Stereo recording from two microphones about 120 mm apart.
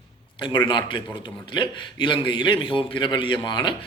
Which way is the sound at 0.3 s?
40° left (ahead or behind).